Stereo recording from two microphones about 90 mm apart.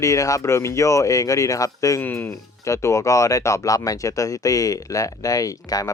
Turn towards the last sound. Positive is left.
turn(degrees=40)  # may be behind; listen again after turning